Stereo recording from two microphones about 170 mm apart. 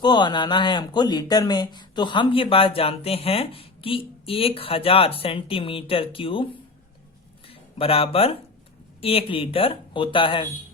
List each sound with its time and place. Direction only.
0.0 s speech: 25° left (ahead or behind)